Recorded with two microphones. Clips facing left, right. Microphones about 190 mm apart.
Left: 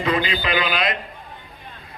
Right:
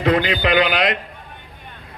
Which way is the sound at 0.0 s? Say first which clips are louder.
Right 4 dB; 70° right (ahead or behind).